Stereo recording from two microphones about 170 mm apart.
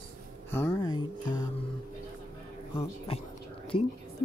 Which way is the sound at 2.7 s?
35° left (ahead or behind).